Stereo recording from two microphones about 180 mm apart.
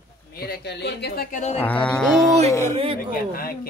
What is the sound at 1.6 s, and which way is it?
Mantra, 5° left (ahead or behind).